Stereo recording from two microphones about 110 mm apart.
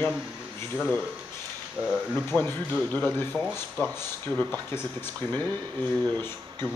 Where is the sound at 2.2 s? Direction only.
20° left (ahead or behind).